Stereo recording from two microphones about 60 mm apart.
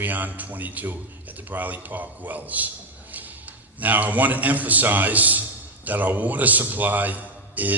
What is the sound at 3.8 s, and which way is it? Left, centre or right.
A man's voice, right.